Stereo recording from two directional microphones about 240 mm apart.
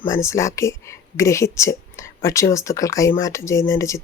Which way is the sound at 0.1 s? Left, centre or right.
Centre.